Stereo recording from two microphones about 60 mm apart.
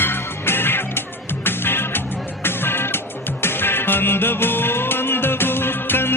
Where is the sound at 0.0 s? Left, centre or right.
Left.